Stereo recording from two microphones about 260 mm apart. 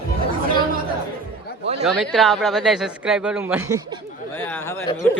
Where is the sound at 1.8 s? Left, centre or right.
Centre.